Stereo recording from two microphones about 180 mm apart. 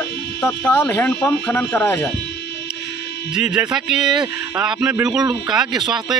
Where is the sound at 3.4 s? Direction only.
5° right (ahead or behind).